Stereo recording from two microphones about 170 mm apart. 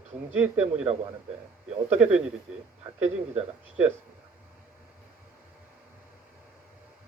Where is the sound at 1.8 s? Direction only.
40° right (ahead or behind).